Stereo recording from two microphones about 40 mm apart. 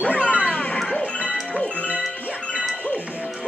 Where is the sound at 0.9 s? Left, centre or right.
Left.